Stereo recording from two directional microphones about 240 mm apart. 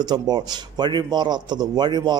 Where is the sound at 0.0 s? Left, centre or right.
Centre.